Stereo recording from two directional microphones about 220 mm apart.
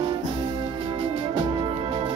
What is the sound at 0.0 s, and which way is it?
Music, 20° right (ahead or behind).